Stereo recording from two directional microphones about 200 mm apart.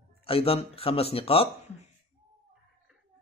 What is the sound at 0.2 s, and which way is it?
Speech, 30° left (ahead or behind).